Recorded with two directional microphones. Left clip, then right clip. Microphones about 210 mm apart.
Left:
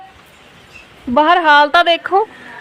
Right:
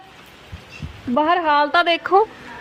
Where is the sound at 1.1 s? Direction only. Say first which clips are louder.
Left 7 dB; 25° left (ahead or behind); by 2.2 s 10° left (ahead or behind).